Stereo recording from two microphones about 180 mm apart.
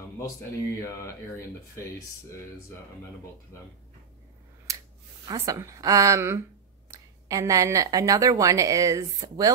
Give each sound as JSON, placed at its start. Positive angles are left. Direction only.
{"t": 5.3, "sound": "a woman's voice", "side_deg": -15}